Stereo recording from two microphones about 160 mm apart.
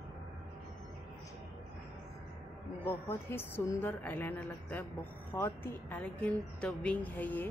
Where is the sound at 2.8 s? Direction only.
15° left (ahead or behind).